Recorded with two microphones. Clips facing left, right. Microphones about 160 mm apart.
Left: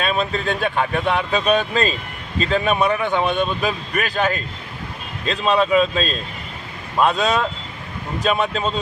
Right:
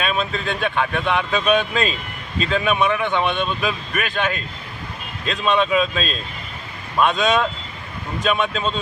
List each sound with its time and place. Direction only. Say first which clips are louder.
0.0 s speech: left 2 dB; 40° left (ahead or behind)
5.5 s speech: left 2 dB; 35° left (ahead or behind)